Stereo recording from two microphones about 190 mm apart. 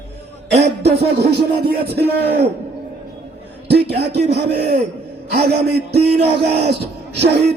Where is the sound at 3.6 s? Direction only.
60° right (ahead or behind).